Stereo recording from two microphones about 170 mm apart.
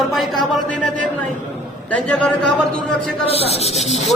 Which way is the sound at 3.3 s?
35° left (ahead or behind).